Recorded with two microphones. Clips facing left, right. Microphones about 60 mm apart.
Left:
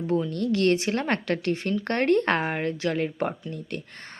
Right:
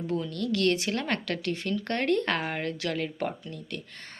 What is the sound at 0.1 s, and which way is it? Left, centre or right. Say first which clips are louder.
A woman's voice: left 5 dB; left.